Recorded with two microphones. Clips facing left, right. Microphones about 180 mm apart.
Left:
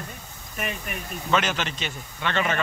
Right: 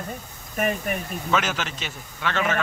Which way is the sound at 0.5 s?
45° right (ahead or behind).